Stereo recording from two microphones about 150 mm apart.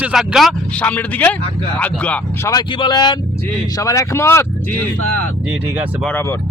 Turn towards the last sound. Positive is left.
turn(degrees=10)  # may be behind; listen again after turning